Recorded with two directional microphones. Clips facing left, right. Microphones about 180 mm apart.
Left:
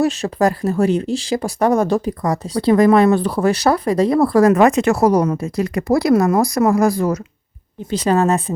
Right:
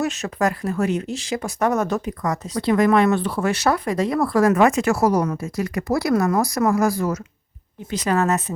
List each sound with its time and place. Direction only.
0.0 s speech: 35° left (ahead or behind)
4.7 s speech: 20° left (ahead or behind)
6.6 s speech: 30° left (ahead or behind)
6.8 s speech: 15° left (ahead or behind)
7.9 s speech: 30° left (ahead or behind)